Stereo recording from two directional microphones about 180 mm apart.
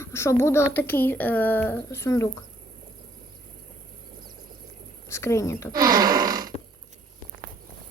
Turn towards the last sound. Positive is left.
turn(degrees=-20)  # may be behind; listen again after turning